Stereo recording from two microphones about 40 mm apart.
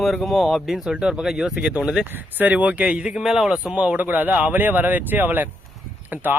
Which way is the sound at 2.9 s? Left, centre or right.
Right.